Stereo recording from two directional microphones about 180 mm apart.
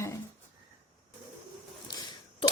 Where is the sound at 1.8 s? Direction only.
25° left (ahead or behind).